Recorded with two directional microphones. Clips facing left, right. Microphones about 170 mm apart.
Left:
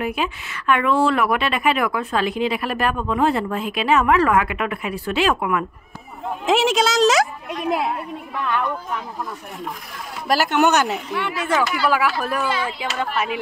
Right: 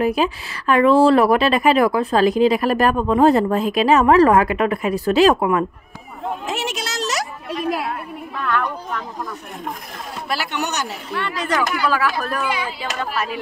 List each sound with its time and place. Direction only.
0.0 s speech: 35° right (ahead or behind)
6.4 s speech: 90° left
7.4 s speech: 20° left (ahead or behind)
10.2 s speech: 45° left (ahead or behind)
11.1 s speech: 10° left (ahead or behind)